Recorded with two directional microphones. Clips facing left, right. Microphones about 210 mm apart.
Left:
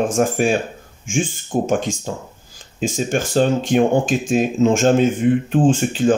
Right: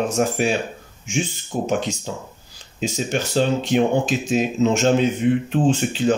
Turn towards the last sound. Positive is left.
turn(degrees=50)  # may be behind; listen again after turning